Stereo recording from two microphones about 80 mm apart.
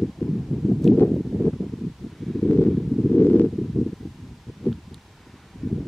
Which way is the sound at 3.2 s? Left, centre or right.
Left.